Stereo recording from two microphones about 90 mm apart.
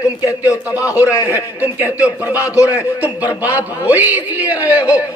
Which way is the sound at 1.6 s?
15° right (ahead or behind).